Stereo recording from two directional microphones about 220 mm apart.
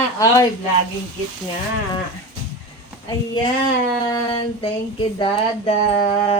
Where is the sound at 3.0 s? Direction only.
20° left (ahead or behind).